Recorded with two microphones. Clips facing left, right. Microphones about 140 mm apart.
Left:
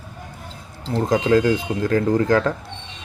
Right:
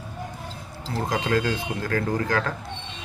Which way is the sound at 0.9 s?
25° left (ahead or behind).